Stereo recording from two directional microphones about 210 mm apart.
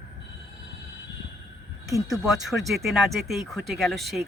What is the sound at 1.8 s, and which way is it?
Speech, 15° right (ahead or behind).